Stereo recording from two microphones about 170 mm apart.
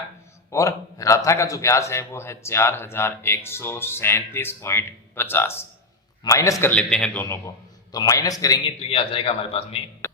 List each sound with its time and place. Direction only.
0.5 s a man's voice: 20° left (ahead or behind)
8.8 s a man's voice: 35° left (ahead or behind)